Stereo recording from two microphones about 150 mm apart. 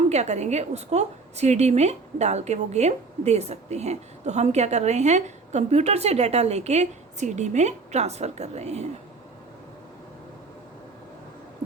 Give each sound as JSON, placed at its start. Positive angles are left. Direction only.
{"t": 0.1, "sound": "a woman's voice", "side_deg": -50}